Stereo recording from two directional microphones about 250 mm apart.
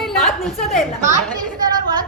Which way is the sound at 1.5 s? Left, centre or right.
Centre.